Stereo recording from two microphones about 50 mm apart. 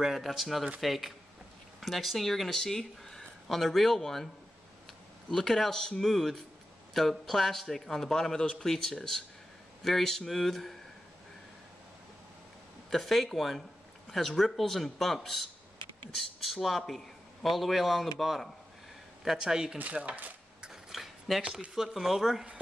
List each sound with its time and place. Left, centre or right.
0.0 s a man's voice: centre
5.3 s a man's voice: centre
12.9 s a man's voice: centre
19.2 s speech: centre
19.9 s speech: right
20.6 s a sound: centre
21.4 s speech: right
21.7 s a man's voice: centre